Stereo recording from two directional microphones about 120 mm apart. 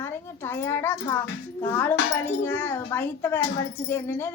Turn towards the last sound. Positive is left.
turn(degrees=20)  # may be behind; listen again after turning